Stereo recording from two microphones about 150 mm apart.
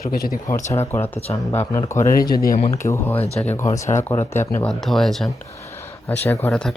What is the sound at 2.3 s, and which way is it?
Speech, 75° left (ahead or behind).